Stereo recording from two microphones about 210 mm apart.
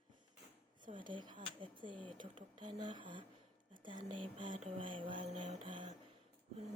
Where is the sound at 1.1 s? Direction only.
20° right (ahead or behind).